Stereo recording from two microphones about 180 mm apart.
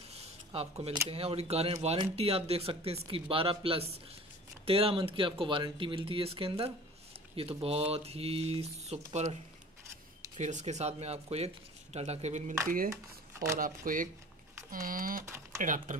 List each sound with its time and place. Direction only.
0.1 s a sound: 35° right (ahead or behind)
1.0 s speech: 35° right (ahead or behind)
12.6 s speech: 50° right (ahead or behind)
15.2 s typing: 15° right (ahead or behind)
15.6 s speech: 45° right (ahead or behind)